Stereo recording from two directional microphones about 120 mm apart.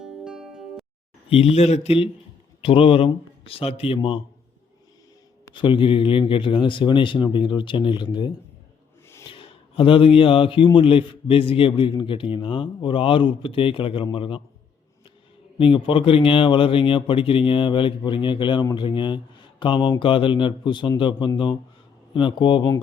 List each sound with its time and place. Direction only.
0.0 s music: 5° right (ahead or behind)
1.3 s a man's voice: 55° left (ahead or behind)
5.5 s a man's voice: 45° left (ahead or behind)
9.3 s a man's voice: 45° left (ahead or behind)
15.5 s a man's voice: 50° left (ahead or behind)